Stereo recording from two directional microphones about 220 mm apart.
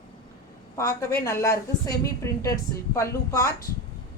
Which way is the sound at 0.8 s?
15° left (ahead or behind).